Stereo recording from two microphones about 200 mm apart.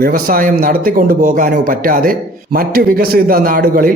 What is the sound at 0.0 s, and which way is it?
Speech, 45° right (ahead or behind).